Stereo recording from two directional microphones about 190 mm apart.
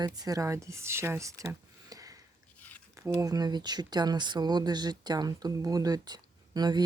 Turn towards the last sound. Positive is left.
turn(degrees=-20)  # may be behind; listen again after turning